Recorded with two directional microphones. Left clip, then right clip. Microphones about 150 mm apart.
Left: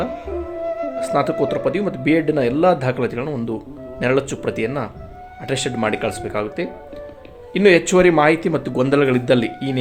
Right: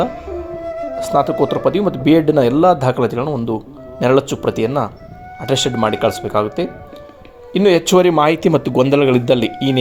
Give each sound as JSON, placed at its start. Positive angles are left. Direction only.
{"t": 0.9, "sound": "speech", "side_deg": -25}